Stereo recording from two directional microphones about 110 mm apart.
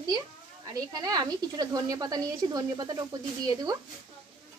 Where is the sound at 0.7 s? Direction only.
35° right (ahead or behind).